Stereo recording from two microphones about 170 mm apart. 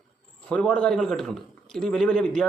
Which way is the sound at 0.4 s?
5° left (ahead or behind).